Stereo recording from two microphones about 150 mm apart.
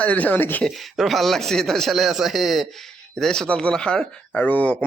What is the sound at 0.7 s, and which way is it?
Speech, centre (ahead or behind).